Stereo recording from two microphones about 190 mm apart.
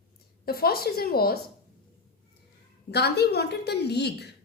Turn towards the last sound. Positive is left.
turn(degrees=60)  # may be behind; listen again after turning